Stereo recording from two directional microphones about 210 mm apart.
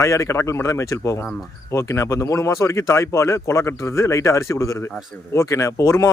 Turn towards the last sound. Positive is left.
turn(degrees=15)  # may be behind; listen again after turning